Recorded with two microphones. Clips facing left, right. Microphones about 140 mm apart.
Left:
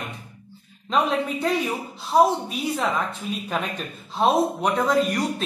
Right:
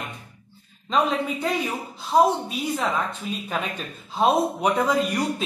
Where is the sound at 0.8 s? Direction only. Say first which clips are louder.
Even; centre (ahead or behind).